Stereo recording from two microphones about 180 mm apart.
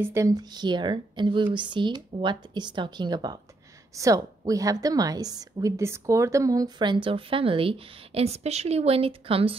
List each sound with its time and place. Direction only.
0.0 s a woman's voice: 15° right (ahead or behind); by 9.6 s 30° right (ahead or behind)